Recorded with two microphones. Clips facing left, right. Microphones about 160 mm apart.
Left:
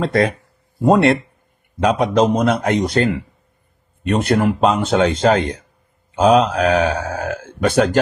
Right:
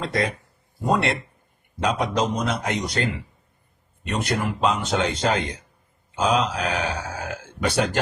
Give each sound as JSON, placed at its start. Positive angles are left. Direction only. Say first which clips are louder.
{"t": 0.0, "sound": "speech", "louder": "left 8 dB", "side_deg": 60}